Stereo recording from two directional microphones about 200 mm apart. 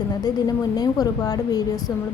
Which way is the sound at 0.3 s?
20° left (ahead or behind).